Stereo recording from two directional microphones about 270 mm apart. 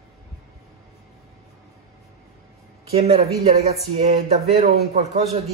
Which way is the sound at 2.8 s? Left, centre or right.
Right.